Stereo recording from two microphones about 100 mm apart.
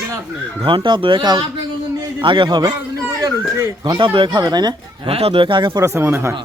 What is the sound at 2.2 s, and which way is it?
Speech, 55° right (ahead or behind).